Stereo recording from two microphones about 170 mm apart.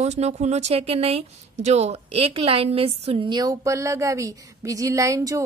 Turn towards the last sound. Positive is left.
turn(degrees=-20)  # may be behind; listen again after turning